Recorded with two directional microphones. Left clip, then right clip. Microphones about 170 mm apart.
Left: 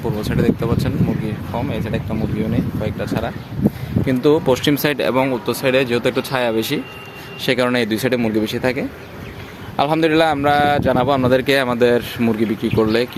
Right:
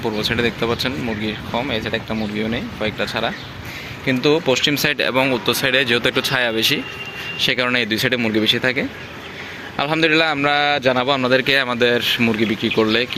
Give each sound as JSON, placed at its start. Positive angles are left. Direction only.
{"t": 0.0, "sound": "a man's voice", "side_deg": 10}
{"t": 4.0, "sound": "a man's voice", "side_deg": 30}